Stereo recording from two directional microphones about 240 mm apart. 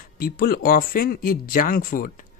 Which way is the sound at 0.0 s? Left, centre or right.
Left.